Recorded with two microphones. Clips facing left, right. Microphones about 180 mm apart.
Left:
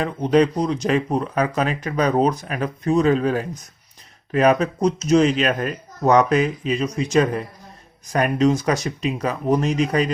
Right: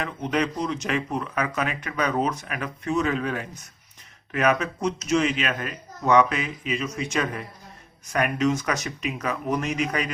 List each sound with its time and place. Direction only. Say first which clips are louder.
0.0 s speech: left 8 dB; 35° left (ahead or behind)